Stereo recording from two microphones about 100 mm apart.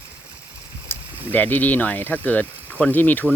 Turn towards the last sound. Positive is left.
turn(degrees=20)  # may be behind; listen again after turning